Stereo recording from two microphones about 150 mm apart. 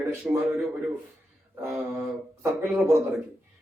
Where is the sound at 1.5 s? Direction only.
20° right (ahead or behind).